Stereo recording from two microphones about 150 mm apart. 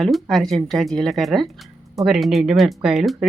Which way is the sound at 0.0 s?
Centre (ahead or behind).